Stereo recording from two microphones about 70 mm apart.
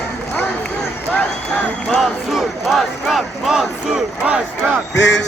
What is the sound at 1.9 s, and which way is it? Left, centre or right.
Crowd, centre.